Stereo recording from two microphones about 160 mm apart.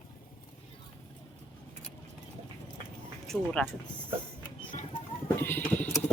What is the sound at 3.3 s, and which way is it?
Speech, 5° left (ahead or behind).